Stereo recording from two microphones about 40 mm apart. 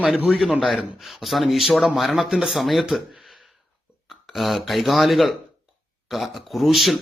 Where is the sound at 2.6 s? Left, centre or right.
Centre.